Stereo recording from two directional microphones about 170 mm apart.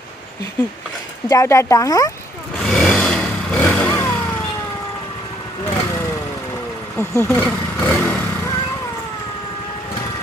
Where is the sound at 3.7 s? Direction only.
10° left (ahead or behind).